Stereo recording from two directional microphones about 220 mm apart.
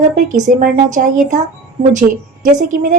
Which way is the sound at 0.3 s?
35° right (ahead or behind).